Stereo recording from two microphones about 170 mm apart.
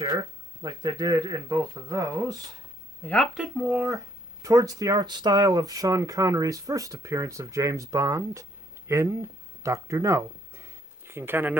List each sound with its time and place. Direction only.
0.0 s speech: 25° right (ahead or behind)
3.3 s speech: 10° right (ahead or behind)